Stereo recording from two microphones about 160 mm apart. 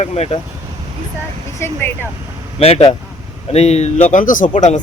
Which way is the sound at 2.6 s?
40° left (ahead or behind).